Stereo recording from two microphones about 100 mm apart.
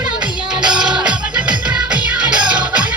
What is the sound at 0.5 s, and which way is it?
Music, 10° right (ahead or behind).